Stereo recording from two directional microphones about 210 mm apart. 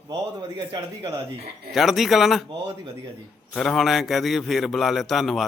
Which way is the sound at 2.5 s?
20° right (ahead or behind).